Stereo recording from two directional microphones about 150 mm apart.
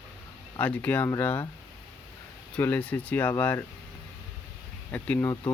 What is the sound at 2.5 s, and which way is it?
Speech, 10° left (ahead or behind).